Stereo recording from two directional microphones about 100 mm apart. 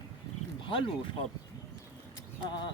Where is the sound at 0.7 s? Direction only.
60° left (ahead or behind).